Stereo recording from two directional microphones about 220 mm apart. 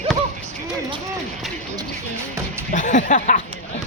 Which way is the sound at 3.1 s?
35° left (ahead or behind).